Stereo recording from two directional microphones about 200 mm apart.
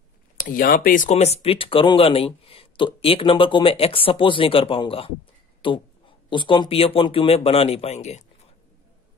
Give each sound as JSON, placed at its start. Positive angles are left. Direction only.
{"t": 0.4, "sound": "speech", "side_deg": 45}